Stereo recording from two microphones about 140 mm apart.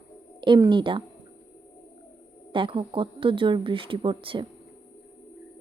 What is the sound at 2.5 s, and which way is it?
Speech, 40° right (ahead or behind).